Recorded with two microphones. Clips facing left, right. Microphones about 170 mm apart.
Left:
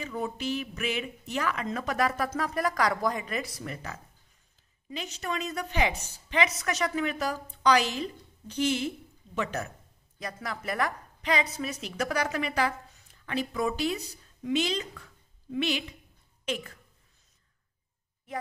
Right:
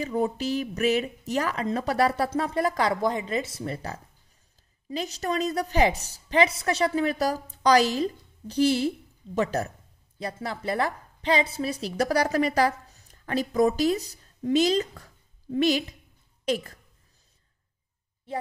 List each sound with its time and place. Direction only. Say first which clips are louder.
0.0 s a woman's voice: right 6 dB; 35° right (ahead or behind)
18.3 s a woman's voice: right 4 dB; 30° right (ahead or behind)